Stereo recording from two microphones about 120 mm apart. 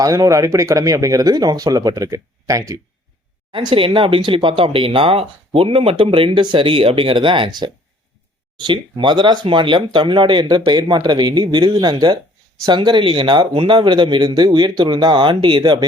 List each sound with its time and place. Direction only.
0.0 s speech: 30° right (ahead or behind)
3.5 s speech: 45° right (ahead or behind)